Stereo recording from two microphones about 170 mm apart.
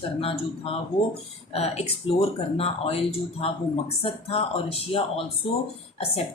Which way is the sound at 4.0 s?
35° left (ahead or behind).